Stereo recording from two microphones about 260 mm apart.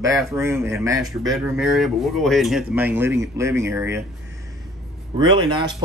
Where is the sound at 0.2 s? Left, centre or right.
Centre.